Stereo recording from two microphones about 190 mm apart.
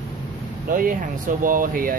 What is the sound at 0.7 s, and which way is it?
Speech, 45° right (ahead or behind).